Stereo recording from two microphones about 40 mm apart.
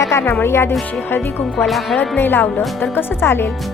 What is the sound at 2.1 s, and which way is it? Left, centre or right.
Speech, left.